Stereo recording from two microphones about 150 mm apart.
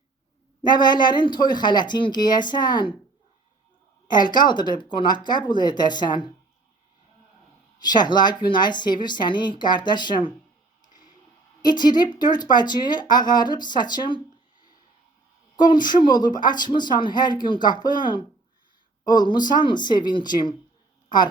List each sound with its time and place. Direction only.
0.6 s speech: 30° left (ahead or behind)
4.1 s speech: 30° left (ahead or behind)
7.8 s speech: 30° left (ahead or behind)
11.6 s speech: 30° left (ahead or behind)
15.6 s speech: 30° left (ahead or behind)